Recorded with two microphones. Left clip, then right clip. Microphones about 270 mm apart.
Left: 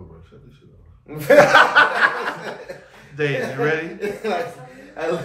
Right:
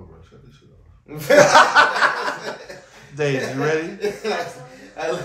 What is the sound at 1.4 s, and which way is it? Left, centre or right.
A man's voice, centre.